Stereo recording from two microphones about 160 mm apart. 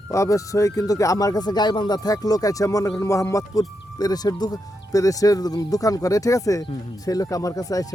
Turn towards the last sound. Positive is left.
turn(degrees=20)  # may be behind; listen again after turning